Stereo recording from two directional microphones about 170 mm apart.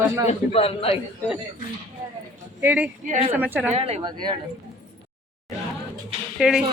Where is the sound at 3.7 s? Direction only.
35° right (ahead or behind).